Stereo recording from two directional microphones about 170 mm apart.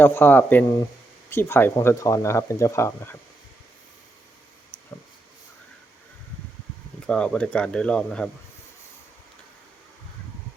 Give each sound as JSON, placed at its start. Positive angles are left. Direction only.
{"t": 0.0, "sound": "speech", "side_deg": 10}
{"t": 7.1, "sound": "speech", "side_deg": 5}